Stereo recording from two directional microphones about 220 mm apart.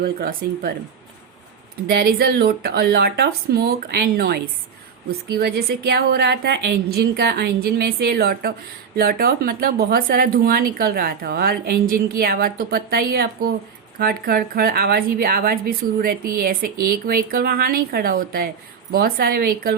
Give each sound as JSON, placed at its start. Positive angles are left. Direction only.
{"t": 0.0, "sound": "speech", "side_deg": -45}
{"t": 1.9, "sound": "speech", "side_deg": -45}